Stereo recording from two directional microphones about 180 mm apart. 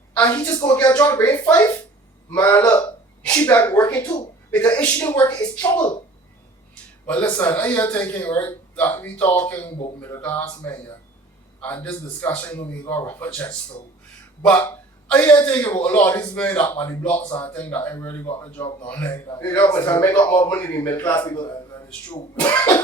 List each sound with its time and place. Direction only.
0.2 s speech: 15° left (ahead or behind)
7.1 s a man's voice: 10° left (ahead or behind)
22.4 s speech: 10° left (ahead or behind)